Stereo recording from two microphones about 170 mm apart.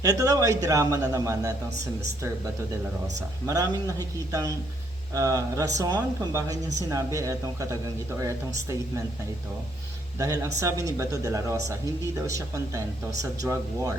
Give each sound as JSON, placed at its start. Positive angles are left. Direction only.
{"t": 0.0, "sound": "speech", "side_deg": -20}
{"t": 3.4, "sound": "speech", "side_deg": -20}
{"t": 10.2, "sound": "speech", "side_deg": -20}